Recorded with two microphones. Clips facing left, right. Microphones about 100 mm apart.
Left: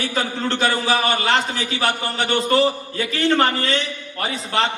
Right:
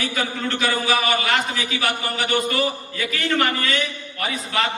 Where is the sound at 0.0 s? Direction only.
30° left (ahead or behind).